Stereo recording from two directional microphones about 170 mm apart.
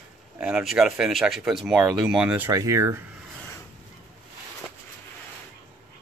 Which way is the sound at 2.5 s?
15° right (ahead or behind).